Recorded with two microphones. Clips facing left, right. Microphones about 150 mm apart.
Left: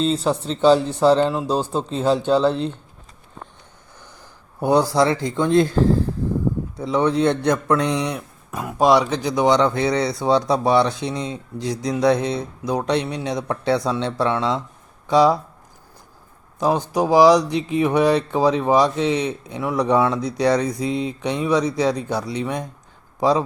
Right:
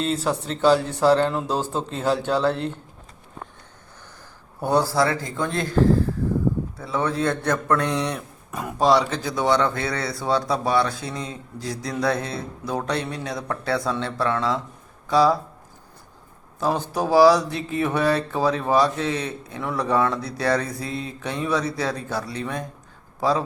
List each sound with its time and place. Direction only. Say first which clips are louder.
0.0 s speech: left 4 dB; 20° left (ahead or behind)
4.6 s speech: left 4 dB; 15° left (ahead or behind)
6.7 s speech: left 6 dB; 20° left (ahead or behind)
8.4 s a sound: left 2 dB; centre (ahead or behind)
8.8 s speech: left 3 dB; 15° left (ahead or behind)
16.6 s speech: left 4 dB; 15° left (ahead or behind)